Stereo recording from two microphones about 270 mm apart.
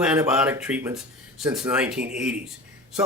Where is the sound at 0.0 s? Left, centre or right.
Centre.